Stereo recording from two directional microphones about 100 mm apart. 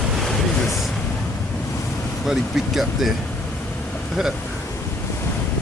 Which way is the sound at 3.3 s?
10° left (ahead or behind).